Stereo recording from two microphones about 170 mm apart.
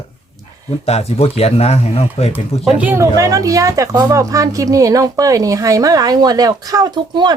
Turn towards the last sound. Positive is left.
turn(degrees=-25)  # may be behind; listen again after turning